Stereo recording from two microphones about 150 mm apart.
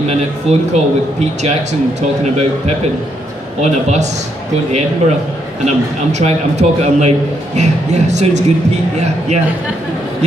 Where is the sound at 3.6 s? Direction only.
50° right (ahead or behind).